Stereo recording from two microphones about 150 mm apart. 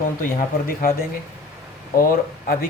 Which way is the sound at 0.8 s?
75° left (ahead or behind).